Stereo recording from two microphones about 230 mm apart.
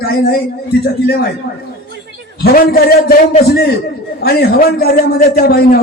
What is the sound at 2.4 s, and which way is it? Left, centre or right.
A man's voice, left.